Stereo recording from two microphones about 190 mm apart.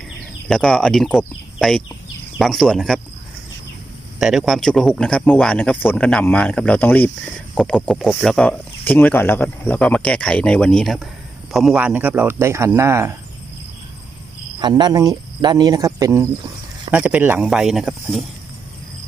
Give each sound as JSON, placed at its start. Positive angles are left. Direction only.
{"t": 0.4, "sound": "speech", "side_deg": 5}
{"t": 4.2, "sound": "speech", "side_deg": 0}
{"t": 7.5, "sound": "speech", "side_deg": 0}
{"t": 14.6, "sound": "speech", "side_deg": -20}